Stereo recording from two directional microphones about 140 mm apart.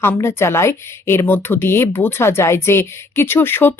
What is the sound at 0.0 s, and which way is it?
A woman's voice, 15° left (ahead or behind).